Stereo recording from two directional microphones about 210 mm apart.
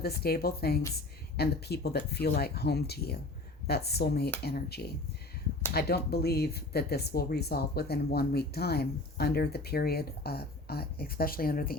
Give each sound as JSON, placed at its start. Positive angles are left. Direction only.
{"t": 0.0, "sound": "speech", "side_deg": 50}
{"t": 5.6, "sound": "speech", "side_deg": 10}
{"t": 6.1, "sound": "speech", "side_deg": 50}